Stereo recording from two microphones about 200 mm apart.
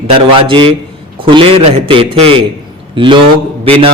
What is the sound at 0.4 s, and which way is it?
A man's voice, 25° right (ahead or behind).